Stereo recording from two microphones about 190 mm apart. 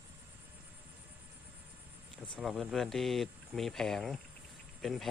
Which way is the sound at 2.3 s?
Centre (ahead or behind).